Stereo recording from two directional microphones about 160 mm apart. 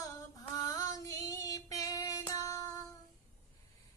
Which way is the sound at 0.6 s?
20° left (ahead or behind).